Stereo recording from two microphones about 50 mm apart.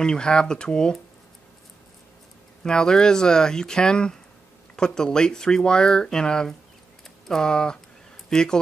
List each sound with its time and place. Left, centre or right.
0.0 s speech: centre
2.6 s speech: centre